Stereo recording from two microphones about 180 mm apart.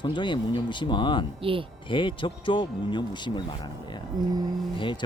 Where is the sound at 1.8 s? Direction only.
25° left (ahead or behind).